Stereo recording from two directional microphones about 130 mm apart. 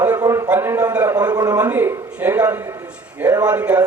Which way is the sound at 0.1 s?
25° right (ahead or behind).